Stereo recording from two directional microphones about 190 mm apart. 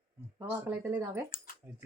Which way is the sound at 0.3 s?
10° right (ahead or behind).